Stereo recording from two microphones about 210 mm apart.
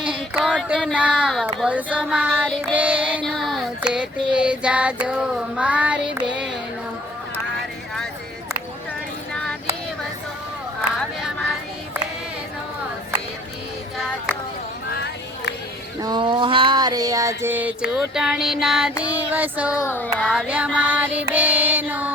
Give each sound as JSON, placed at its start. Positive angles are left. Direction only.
{"t": 0.0, "sound": "child singing", "side_deg": -5}
{"t": 9.3, "sound": "child singing", "side_deg": 5}
{"t": 16.0, "sound": "a sound", "side_deg": -20}
{"t": 18.6, "sound": "child singing", "side_deg": 0}
{"t": 19.9, "sound": "child singing", "side_deg": 10}
{"t": 20.2, "sound": "child singing", "side_deg": -5}
{"t": 20.7, "sound": "music", "side_deg": -5}